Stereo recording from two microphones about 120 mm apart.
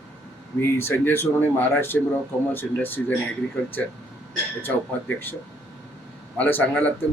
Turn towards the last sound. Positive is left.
turn(degrees=10)  # may be behind; listen again after turning